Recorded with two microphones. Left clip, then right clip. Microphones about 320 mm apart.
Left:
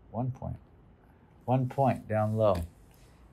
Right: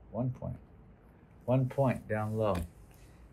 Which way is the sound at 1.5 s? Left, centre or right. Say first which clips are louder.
Left 3 dB; left.